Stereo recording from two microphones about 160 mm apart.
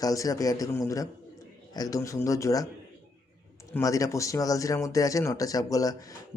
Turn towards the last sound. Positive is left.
turn(degrees=20)  # may be behind; listen again after turning